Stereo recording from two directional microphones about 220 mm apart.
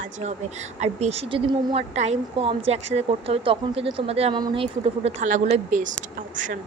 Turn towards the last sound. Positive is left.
turn(degrees=-35)  # may be behind; listen again after turning